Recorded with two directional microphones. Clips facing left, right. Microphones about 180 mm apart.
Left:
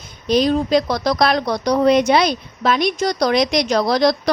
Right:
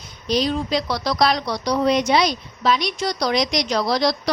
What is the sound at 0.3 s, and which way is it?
Speech, 50° left (ahead or behind).